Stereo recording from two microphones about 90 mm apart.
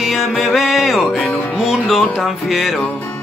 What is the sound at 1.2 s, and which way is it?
Music, 20° left (ahead or behind).